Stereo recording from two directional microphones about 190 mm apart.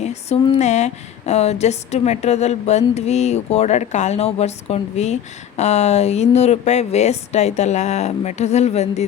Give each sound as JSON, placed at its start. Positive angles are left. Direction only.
{"t": 0.0, "sound": "speech", "side_deg": 35}